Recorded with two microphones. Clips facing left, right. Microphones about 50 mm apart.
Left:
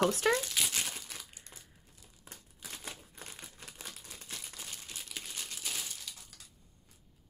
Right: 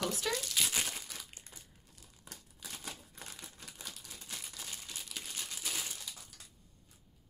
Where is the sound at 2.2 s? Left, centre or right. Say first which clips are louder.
Even; left.